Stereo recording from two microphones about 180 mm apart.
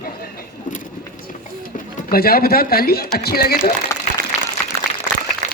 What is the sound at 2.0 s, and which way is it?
Speech, 55° left (ahead or behind).